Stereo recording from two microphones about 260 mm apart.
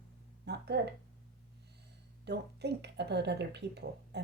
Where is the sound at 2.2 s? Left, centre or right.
Right.